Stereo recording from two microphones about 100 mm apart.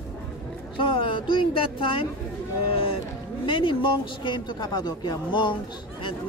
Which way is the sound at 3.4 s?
55° left (ahead or behind).